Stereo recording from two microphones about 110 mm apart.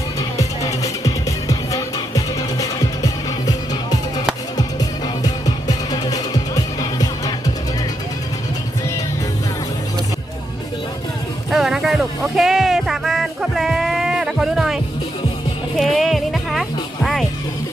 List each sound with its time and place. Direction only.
0.2 s music: 30° left (ahead or behind)
11.5 s music: 5° right (ahead or behind)